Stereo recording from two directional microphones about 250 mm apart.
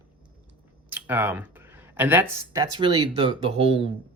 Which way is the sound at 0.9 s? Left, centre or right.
Centre.